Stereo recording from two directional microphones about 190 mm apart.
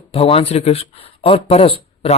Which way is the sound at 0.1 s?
30° left (ahead or behind).